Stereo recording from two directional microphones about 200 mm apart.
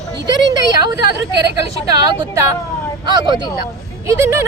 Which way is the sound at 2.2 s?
15° right (ahead or behind).